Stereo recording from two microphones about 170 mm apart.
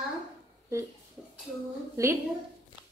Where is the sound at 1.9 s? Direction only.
15° right (ahead or behind).